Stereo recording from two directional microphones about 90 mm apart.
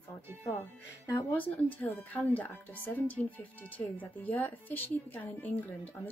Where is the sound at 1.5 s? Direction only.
15° left (ahead or behind).